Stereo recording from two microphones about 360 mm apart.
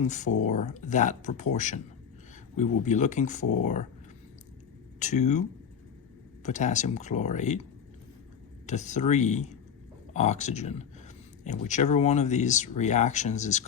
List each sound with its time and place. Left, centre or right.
0.1 s speech: centre
4.9 s speech: centre
8.6 s speech: centre